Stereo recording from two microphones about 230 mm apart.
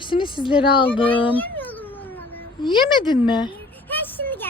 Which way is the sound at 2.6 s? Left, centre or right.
Centre.